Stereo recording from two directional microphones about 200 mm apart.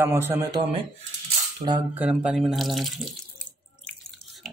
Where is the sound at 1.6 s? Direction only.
25° right (ahead or behind).